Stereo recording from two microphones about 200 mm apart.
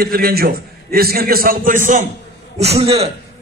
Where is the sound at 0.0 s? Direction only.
50° right (ahead or behind).